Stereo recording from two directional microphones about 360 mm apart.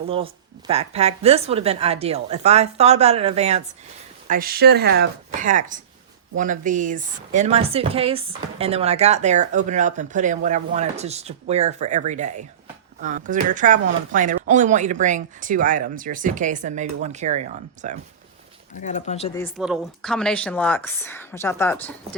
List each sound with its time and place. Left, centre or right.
0.7 s a woman's voice: centre
18.8 s speech: centre
19.4 s speech: centre